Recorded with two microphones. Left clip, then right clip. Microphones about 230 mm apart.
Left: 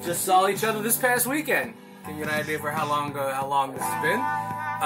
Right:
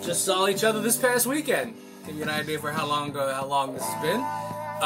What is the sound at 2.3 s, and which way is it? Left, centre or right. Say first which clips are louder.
Speech: left 3 dB; centre.